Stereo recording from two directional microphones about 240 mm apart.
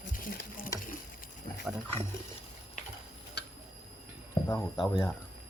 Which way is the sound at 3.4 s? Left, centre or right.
Left.